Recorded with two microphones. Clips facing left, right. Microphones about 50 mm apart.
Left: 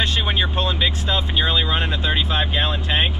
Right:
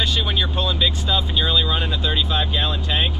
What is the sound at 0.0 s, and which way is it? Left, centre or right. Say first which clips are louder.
Speech: left 1 dB; left.